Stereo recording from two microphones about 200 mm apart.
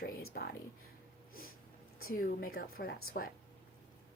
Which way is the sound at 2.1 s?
45° left (ahead or behind).